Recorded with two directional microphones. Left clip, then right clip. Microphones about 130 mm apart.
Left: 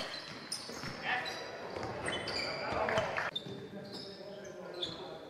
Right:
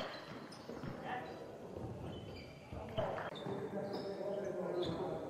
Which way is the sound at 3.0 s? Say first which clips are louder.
Left 6 dB; 15° left (ahead or behind).